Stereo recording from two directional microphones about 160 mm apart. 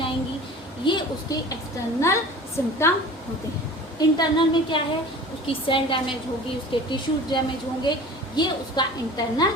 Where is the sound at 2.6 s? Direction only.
15° left (ahead or behind).